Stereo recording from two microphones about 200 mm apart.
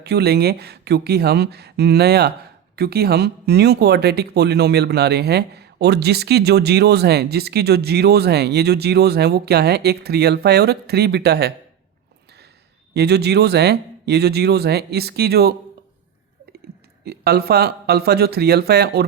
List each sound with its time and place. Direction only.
0.0 s speech: 55° right (ahead or behind)
12.9 s speech: 55° right (ahead or behind)
17.0 s speech: 55° right (ahead or behind)